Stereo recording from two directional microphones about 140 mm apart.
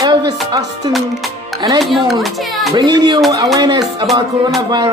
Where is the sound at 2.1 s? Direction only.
Centre (ahead or behind).